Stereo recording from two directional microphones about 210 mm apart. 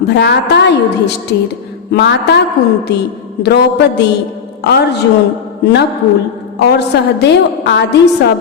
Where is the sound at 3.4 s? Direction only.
55° left (ahead or behind).